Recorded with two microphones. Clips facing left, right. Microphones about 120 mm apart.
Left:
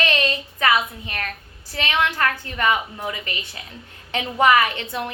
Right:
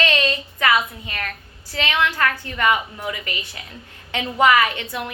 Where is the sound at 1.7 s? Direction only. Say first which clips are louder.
Right 1 dB; 20° left (ahead or behind).